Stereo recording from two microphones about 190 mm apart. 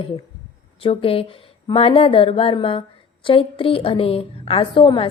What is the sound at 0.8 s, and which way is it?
A woman's voice, 30° left (ahead or behind).